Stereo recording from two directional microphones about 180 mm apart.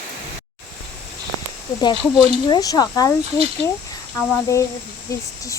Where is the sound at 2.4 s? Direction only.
20° left (ahead or behind).